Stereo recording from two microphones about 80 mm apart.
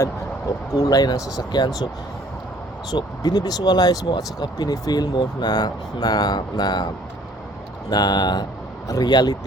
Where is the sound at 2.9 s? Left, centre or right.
Left.